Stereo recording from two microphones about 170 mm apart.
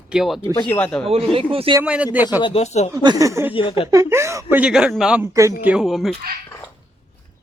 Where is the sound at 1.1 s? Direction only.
35° right (ahead or behind).